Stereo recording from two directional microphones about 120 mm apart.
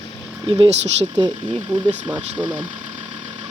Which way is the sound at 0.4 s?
40° right (ahead or behind).